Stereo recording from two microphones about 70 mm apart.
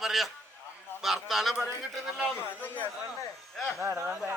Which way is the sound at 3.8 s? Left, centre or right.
Right.